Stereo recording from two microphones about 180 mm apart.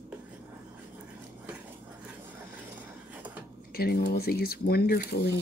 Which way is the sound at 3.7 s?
60° left (ahead or behind).